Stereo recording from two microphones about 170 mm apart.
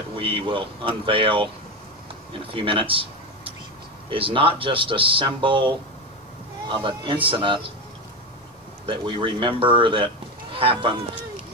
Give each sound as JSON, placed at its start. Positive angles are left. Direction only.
{"t": 0.2, "sound": "speech", "side_deg": -30}
{"t": 2.5, "sound": "speech", "side_deg": -30}
{"t": 6.8, "sound": "speech", "side_deg": -30}
{"t": 8.8, "sound": "speech", "side_deg": -30}